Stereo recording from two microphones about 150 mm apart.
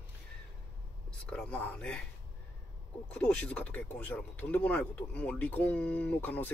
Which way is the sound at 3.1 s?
5° left (ahead or behind).